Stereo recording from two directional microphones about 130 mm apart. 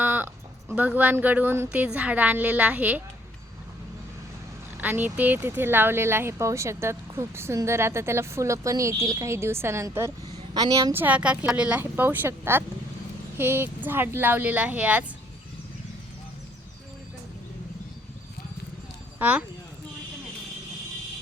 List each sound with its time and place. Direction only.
0.0 s a sound: 15° right (ahead or behind)
0.8 s a woman's voice: 10° right (ahead or behind)
4.8 s speech: 15° right (ahead or behind); by 10.9 s 30° right (ahead or behind)
10.9 s a woman's voice: 10° right (ahead or behind)
19.2 s a woman's voice: 10° right (ahead or behind)